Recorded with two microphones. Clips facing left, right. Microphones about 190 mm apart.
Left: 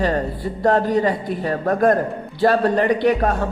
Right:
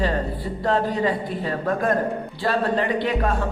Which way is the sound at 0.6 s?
45° left (ahead or behind).